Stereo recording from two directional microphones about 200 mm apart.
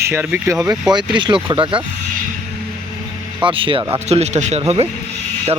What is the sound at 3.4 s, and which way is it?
Speech, 25° right (ahead or behind).